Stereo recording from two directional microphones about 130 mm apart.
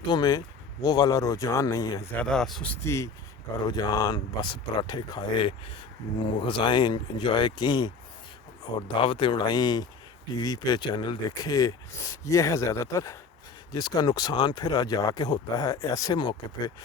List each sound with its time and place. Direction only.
0.1 s speech: 30° left (ahead or behind)
2.1 s speech: 5° left (ahead or behind)
2.8 s speech: 20° left (ahead or behind)
9.0 s speech: 40° left (ahead or behind)